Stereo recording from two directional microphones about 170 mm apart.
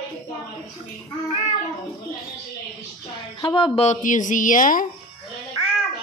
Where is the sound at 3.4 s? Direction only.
30° left (ahead or behind); by 4.8 s 55° left (ahead or behind).